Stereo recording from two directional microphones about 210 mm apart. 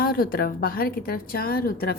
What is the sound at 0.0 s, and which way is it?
A woman's voice, 45° left (ahead or behind).